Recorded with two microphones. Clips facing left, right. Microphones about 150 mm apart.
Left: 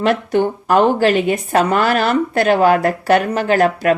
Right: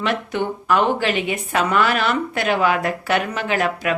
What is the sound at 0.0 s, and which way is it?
Speech, 40° left (ahead or behind).